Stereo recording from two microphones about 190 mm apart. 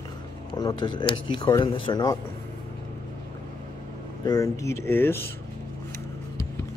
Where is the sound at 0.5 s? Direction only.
25° left (ahead or behind).